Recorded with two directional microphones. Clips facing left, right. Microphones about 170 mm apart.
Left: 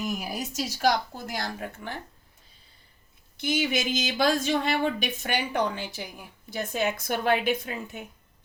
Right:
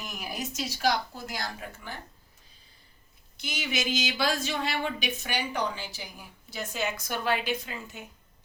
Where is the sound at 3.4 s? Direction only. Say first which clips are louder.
Left 7 dB; 55° left (ahead or behind).